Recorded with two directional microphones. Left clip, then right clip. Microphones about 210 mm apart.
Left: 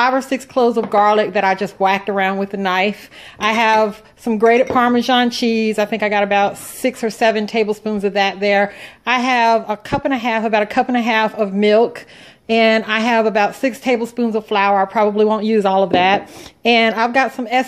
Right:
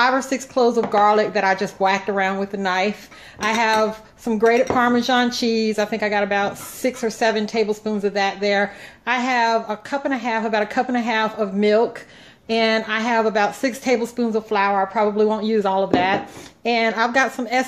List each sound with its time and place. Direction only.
0.0 s a woman's voice: 30° left (ahead or behind)